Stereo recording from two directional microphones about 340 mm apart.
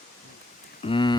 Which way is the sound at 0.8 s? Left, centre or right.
Centre.